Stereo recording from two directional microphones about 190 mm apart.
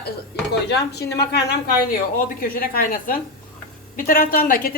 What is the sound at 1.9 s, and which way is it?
A woman's voice, 50° left (ahead or behind).